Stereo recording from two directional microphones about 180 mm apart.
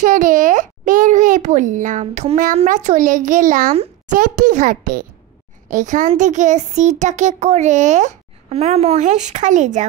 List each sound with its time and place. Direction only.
0.0 s a child's voice: 45° right (ahead or behind)
3.7 s a sound: 35° right (ahead or behind)
4.2 s a child's voice: 45° right (ahead or behind)